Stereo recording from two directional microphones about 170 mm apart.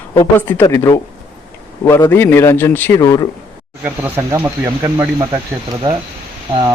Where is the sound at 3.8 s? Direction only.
15° right (ahead or behind).